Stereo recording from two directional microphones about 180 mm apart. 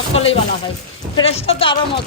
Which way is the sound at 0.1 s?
35° left (ahead or behind).